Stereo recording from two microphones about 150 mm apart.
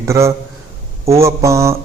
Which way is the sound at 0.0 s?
20° right (ahead or behind).